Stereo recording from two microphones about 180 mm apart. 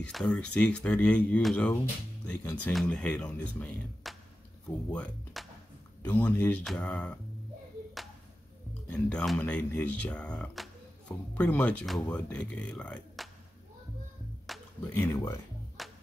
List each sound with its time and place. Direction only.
0.0 s speech: 5° left (ahead or behind)
4.1 s music: centre (ahead or behind)
4.9 s speech: 5° left (ahead or behind)
9.1 s speech: centre (ahead or behind)
9.4 s speech: 10° left (ahead or behind)
14.4 s music: centre (ahead or behind)
14.9 s speech: 15° left (ahead or behind)
15.8 s music: centre (ahead or behind)